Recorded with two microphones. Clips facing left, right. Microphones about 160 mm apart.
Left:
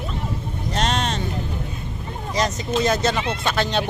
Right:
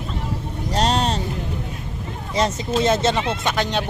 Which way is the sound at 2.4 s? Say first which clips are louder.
Right 2 dB; 25° right (ahead or behind).